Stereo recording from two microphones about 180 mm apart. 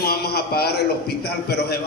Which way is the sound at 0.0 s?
60° left (ahead or behind).